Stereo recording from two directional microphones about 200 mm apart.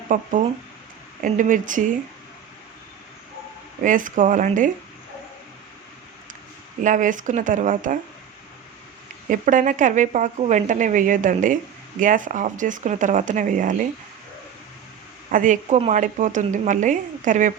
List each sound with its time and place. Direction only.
0.1 s speech: 40° right (ahead or behind)
3.8 s speech: 40° right (ahead or behind)
6.8 s speech: 40° right (ahead or behind)
9.3 s speech: 40° right (ahead or behind)
15.3 s speech: 40° right (ahead or behind)